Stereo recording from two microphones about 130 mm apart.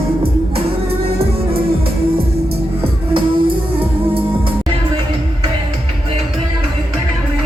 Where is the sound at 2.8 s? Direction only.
40° right (ahead or behind).